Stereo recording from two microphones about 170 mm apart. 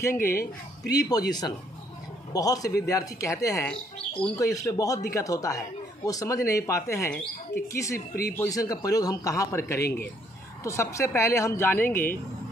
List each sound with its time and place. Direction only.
0.0 s speech: 15° left (ahead or behind)
0.3 s speech: 60° left (ahead or behind)
0.9 s a man's voice: 20° left (ahead or behind)
2.3 s a man's voice: 20° left (ahead or behind)
3.6 s speech: 5° left (ahead or behind)
4.4 s a man's voice: 20° left (ahead or behind)